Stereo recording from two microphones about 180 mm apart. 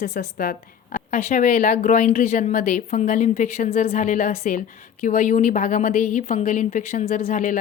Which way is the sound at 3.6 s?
35° left (ahead or behind).